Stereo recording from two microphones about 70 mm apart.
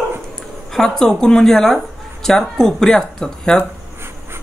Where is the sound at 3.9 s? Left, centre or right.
Right.